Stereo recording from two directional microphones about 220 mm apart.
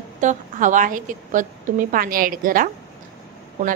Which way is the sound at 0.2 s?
35° right (ahead or behind).